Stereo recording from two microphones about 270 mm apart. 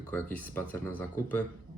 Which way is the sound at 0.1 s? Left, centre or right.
Centre.